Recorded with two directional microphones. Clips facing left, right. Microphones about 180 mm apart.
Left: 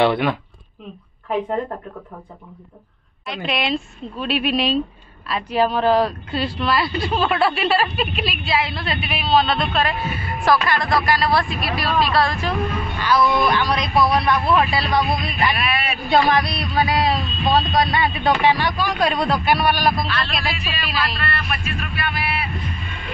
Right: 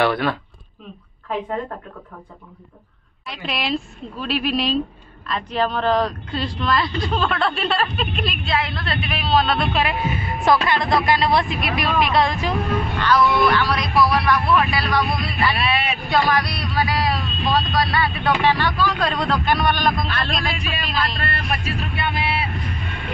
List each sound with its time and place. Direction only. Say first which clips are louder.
0.0 s speech: left 2 dB; 20° left (ahead or behind)
3.4 s speech: left 1 dB; centre (ahead or behind)
9.7 s speech: even; 15° right (ahead or behind)
13.0 s speech: even; 10° left (ahead or behind)
15.5 s speech: right 1 dB; 30° right (ahead or behind)
16.1 s speech: left 3 dB; 25° left (ahead or behind); by 20.0 s 5° left (ahead or behind)
20.1 s speech: even; 50° right (ahead or behind)
20.3 s speech: right 1 dB; 5° left (ahead or behind)
21.6 s speech: right 2 dB; 25° right (ahead or behind)